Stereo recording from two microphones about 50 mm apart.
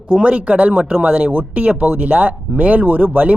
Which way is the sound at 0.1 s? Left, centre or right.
Right.